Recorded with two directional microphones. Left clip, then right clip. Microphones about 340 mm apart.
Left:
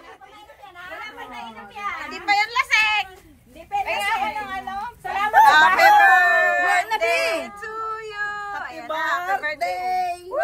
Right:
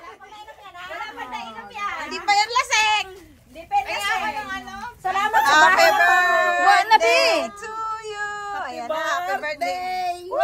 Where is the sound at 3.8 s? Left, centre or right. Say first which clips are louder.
Left 1 dB; left.